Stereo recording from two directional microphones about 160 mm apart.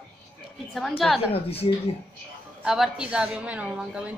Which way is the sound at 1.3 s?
40° left (ahead or behind).